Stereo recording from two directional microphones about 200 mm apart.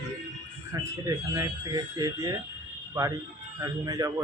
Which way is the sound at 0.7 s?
15° right (ahead or behind).